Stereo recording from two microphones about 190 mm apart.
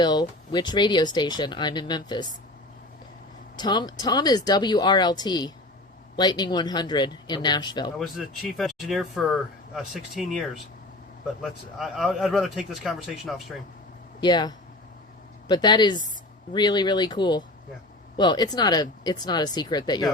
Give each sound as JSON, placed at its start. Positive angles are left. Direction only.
{"t": 0.0, "sound": "speech", "side_deg": 20}
{"t": 3.6, "sound": "speech", "side_deg": 20}
{"t": 7.9, "sound": "speech", "side_deg": 0}
{"t": 14.2, "sound": "speech", "side_deg": 20}